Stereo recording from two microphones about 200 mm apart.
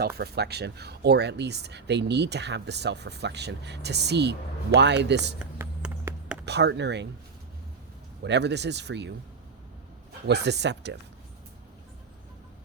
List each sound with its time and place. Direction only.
0.2 s speech: 55° right (ahead or behind)
5.4 s a sound: 10° right (ahead or behind)
6.4 s speech: 55° right (ahead or behind)
8.2 s speech: 60° right (ahead or behind)
10.2 s speech: 60° right (ahead or behind)